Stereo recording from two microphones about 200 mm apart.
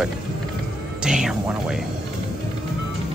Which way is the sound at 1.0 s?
5° right (ahead or behind).